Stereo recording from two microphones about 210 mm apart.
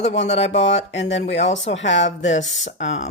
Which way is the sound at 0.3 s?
30° left (ahead or behind).